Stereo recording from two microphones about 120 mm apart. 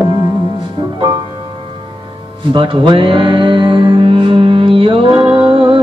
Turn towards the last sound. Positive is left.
turn(degrees=-45)  # may be behind; listen again after turning